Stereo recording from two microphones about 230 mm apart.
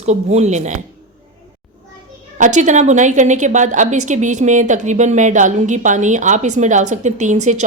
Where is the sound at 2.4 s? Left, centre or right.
Right.